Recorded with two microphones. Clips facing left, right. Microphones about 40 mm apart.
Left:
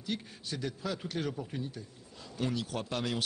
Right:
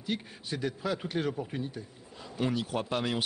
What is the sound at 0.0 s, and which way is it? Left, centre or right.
Speech, centre.